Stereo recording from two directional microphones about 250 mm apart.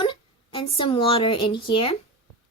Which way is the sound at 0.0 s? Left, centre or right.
Centre.